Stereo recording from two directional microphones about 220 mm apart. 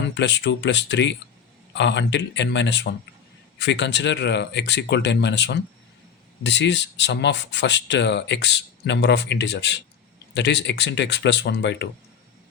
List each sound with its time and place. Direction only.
0.1 s speech: 50° left (ahead or behind)